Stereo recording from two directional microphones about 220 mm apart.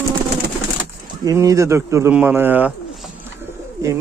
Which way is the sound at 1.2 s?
15° right (ahead or behind).